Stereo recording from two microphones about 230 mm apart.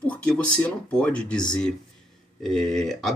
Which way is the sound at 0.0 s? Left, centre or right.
Centre.